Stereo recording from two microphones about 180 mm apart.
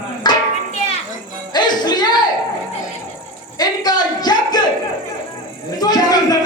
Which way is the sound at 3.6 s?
20° left (ahead or behind).